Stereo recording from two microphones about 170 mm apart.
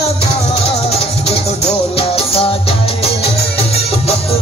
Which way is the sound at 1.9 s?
35° left (ahead or behind).